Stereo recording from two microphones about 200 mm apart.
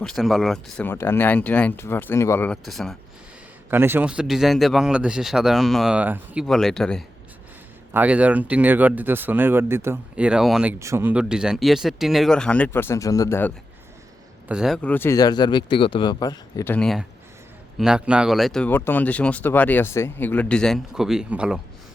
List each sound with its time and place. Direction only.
0.0 s speech: centre (ahead or behind)
3.7 s speech: 10° right (ahead or behind); by 13.5 s 10° left (ahead or behind)
14.4 s speech: 5° right (ahead or behind)